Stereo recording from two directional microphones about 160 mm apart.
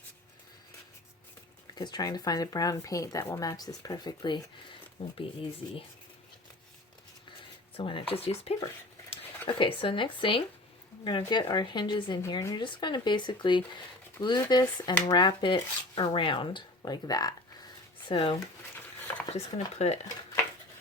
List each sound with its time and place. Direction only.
1.7 s speech: 25° left (ahead or behind)
7.8 s speech: 35° left (ahead or behind)
9.6 s speech: 30° left (ahead or behind)